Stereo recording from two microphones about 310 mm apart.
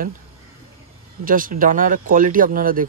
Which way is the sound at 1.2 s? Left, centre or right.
Right.